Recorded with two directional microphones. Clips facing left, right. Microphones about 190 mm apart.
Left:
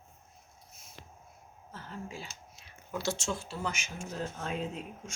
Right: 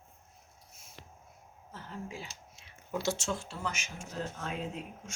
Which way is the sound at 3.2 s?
Centre (ahead or behind).